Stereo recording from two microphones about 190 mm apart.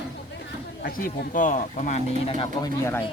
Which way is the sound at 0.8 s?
50° left (ahead or behind).